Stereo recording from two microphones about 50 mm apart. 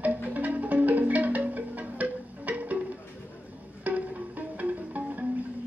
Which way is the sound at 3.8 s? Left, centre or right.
Right.